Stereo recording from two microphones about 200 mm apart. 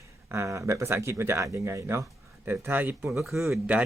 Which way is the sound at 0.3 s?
15° right (ahead or behind).